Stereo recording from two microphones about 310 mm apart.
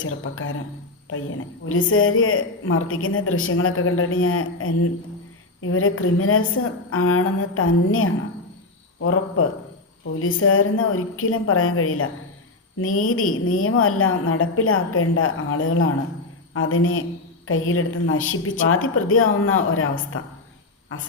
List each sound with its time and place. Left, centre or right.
0.0 s a woman's voice: left
1.6 s a woman's voice: left